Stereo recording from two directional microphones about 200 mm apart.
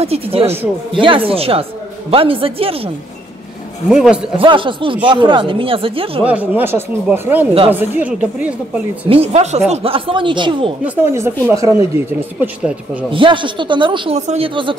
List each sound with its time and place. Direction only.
0.0 s a man's voice: 30° right (ahead or behind)
3.9 s a man's voice: 5° right (ahead or behind)
4.4 s a man's voice: 25° right (ahead or behind)
6.2 s speech: 10° right (ahead or behind)
9.1 s a man's voice: 30° right (ahead or behind)
11.0 s speech: 15° right (ahead or behind)
13.1 s a man's voice: 25° right (ahead or behind)